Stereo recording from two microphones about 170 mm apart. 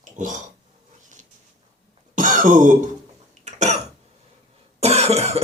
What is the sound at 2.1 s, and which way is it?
Throat clearing, 50° right (ahead or behind).